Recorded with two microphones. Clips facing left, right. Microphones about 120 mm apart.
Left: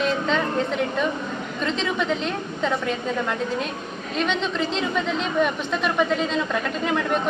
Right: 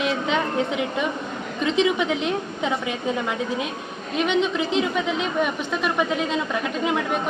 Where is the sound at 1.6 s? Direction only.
15° right (ahead or behind).